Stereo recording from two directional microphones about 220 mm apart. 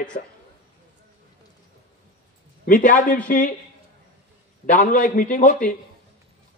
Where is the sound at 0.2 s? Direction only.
35° left (ahead or behind).